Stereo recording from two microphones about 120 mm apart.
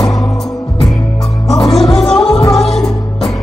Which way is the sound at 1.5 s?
30° left (ahead or behind).